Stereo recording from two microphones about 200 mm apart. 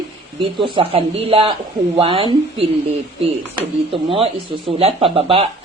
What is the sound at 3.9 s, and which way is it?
Speech, 25° right (ahead or behind).